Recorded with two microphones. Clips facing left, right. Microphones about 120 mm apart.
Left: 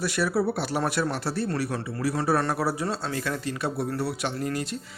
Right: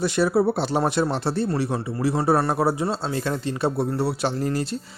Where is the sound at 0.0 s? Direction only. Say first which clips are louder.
Right 5 dB; 25° right (ahead or behind).